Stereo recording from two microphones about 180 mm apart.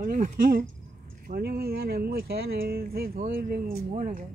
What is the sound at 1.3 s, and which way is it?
Speech, 60° right (ahead or behind).